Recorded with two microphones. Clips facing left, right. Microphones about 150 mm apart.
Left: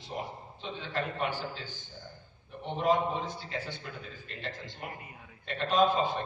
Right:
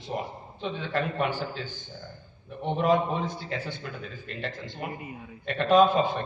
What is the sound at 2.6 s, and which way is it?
Speech, 65° right (ahead or behind).